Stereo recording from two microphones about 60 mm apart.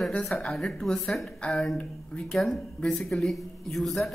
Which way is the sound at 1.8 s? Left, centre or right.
Centre.